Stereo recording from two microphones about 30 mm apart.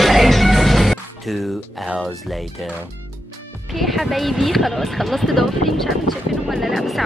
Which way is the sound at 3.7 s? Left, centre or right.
Centre.